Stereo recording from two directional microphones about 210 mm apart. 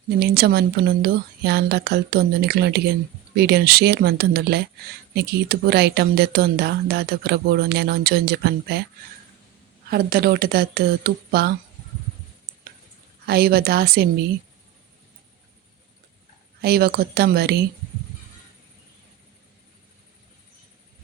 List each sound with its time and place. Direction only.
0.2 s speech: 50° right (ahead or behind)
9.8 s speech: 45° right (ahead or behind)
13.2 s speech: 45° right (ahead or behind)
16.6 s speech: 50° right (ahead or behind)